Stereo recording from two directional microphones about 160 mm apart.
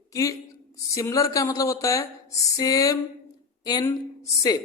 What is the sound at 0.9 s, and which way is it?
Speech, 20° left (ahead or behind).